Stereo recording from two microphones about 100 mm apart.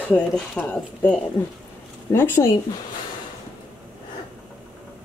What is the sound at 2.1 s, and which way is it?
Speech, 25° left (ahead or behind).